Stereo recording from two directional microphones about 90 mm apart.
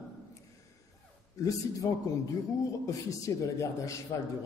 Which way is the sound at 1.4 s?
40° left (ahead or behind).